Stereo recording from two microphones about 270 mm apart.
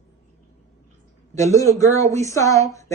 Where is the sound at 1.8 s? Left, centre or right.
Centre.